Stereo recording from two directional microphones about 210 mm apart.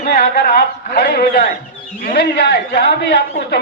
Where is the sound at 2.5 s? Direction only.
50° left (ahead or behind).